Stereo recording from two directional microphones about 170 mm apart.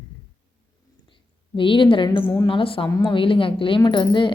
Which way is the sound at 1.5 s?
30° left (ahead or behind).